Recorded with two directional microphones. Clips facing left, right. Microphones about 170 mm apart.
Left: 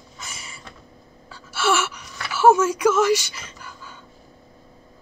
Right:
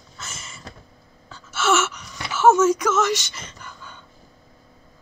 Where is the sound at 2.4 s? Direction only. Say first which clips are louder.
Even; 10° left (ahead or behind).